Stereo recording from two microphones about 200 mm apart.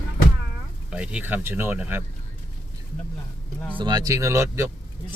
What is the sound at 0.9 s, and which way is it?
Speech, 5° right (ahead or behind).